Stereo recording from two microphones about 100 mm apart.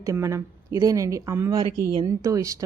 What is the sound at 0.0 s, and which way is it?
A woman's voice, 30° right (ahead or behind).